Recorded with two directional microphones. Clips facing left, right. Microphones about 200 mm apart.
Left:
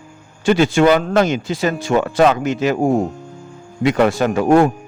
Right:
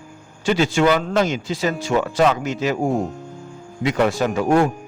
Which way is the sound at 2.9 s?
Centre (ahead or behind).